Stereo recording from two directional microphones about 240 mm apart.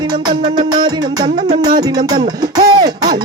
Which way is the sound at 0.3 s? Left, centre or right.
Centre.